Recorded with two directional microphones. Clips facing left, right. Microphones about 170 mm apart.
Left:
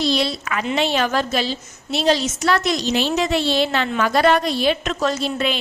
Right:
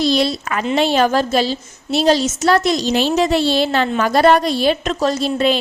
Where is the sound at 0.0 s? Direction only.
40° right (ahead or behind).